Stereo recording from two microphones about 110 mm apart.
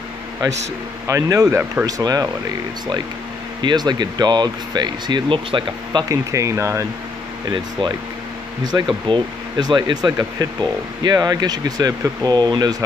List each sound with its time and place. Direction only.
1.0 s speech: 30° right (ahead or behind)
3.6 s speech: 40° right (ahead or behind)
6.0 s speech: 30° right (ahead or behind)
7.4 s speech: 40° right (ahead or behind)
9.0 s speech: 45° right (ahead or behind)